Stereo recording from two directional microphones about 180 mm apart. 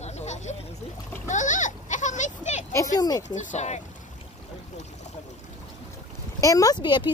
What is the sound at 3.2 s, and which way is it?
Speech, 40° left (ahead or behind).